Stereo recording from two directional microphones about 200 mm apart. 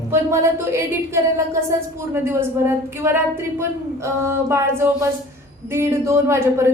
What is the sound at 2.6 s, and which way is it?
A woman's voice, 10° right (ahead or behind).